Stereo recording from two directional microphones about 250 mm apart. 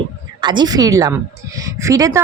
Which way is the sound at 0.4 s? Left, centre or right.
Centre.